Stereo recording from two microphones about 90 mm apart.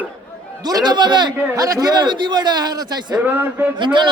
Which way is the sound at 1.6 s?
40° right (ahead or behind).